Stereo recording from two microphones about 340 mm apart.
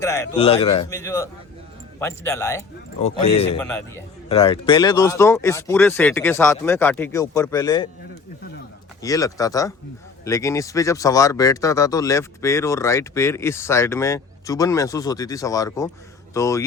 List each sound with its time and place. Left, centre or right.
0.0 s speech: centre
3.7 s speech: centre
9.0 s speech: centre